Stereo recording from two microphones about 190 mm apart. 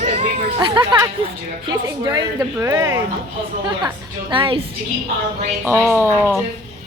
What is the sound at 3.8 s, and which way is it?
Speech, 25° right (ahead or behind).